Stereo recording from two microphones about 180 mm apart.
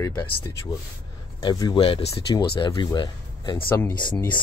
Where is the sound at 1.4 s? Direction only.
25° left (ahead or behind).